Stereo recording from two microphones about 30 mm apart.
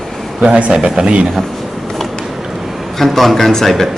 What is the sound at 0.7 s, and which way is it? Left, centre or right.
Speech, right.